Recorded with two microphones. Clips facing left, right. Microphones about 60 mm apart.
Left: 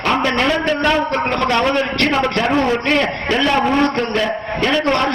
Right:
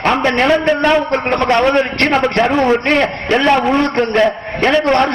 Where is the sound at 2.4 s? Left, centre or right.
Right.